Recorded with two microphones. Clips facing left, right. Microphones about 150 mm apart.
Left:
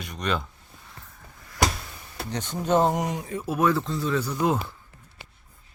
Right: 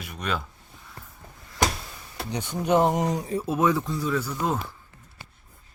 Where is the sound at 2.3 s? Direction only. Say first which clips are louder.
Right 1 dB; 10° right (ahead or behind).